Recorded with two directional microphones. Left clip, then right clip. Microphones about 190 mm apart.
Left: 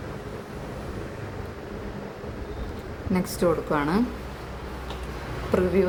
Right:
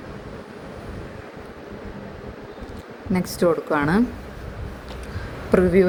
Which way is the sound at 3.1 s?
25° right (ahead or behind).